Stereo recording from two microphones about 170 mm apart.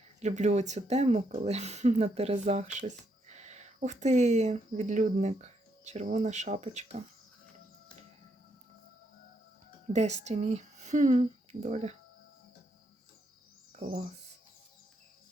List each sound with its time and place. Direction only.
0.2 s speech: 40° right (ahead or behind)
9.9 s speech: 40° right (ahead or behind)
13.7 s speech: 50° right (ahead or behind)